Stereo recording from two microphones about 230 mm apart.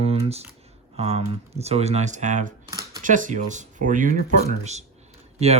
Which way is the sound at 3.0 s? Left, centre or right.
Right.